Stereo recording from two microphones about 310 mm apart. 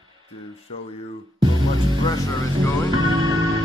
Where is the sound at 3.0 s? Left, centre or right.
Centre.